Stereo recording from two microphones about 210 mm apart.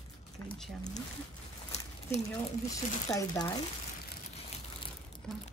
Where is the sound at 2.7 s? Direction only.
15° left (ahead or behind).